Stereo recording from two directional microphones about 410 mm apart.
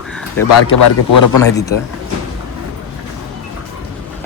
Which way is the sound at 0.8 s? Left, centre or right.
Left.